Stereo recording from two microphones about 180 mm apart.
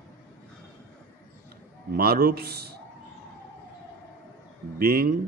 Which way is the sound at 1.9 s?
60° right (ahead or behind).